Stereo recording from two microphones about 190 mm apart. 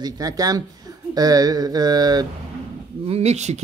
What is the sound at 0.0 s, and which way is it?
Speech, 20° right (ahead or behind).